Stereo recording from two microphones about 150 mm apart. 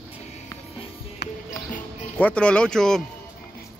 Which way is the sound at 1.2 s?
90° left.